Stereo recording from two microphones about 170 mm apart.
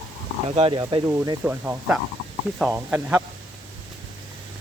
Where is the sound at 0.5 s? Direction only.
30° right (ahead or behind); by 3.2 s 10° right (ahead or behind).